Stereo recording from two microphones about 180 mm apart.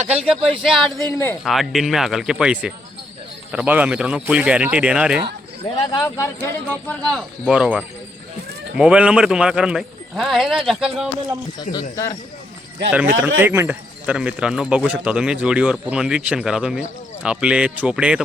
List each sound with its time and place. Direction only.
0.0 s speech: 35° right (ahead or behind)
0.6 s speech: centre (ahead or behind)
5.7 s speech: 20° left (ahead or behind)
6.8 s speech: 5° left (ahead or behind)
11.7 s speech: 20° left (ahead or behind)
12.9 s speech: 10° right (ahead or behind)